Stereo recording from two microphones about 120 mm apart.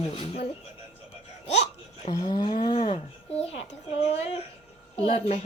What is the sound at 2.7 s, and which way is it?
A child's voice, 55° left (ahead or behind).